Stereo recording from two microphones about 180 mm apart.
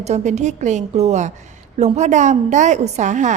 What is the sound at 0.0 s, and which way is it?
A woman's voice, 40° right (ahead or behind).